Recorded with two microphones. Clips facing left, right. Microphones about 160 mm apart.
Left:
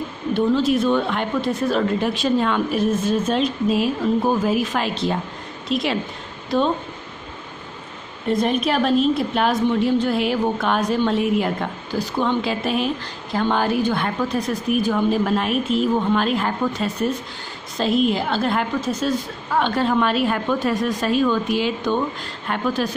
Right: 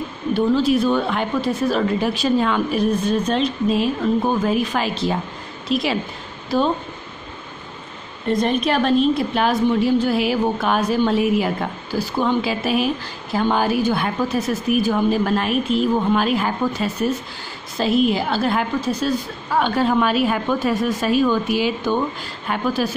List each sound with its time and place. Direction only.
0.3 s a woman's voice: centre (ahead or behind)
8.3 s a woman's voice: 5° left (ahead or behind)